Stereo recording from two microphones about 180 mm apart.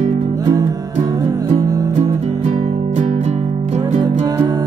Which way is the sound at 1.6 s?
20° right (ahead or behind).